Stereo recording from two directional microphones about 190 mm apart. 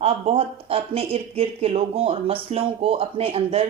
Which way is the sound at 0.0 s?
30° right (ahead or behind).